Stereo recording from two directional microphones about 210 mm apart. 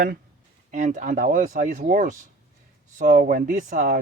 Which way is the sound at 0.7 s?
35° right (ahead or behind).